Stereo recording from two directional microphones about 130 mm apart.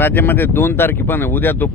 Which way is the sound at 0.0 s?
15° left (ahead or behind).